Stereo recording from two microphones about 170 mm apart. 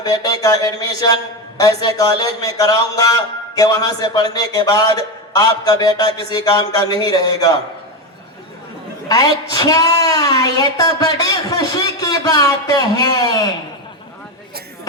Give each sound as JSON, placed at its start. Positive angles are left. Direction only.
{"t": 0.0, "sound": "speech", "side_deg": 20}
{"t": 9.0, "sound": "speech", "side_deg": 20}